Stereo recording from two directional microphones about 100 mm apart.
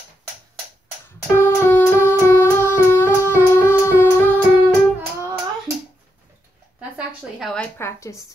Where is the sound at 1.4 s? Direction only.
20° left (ahead or behind).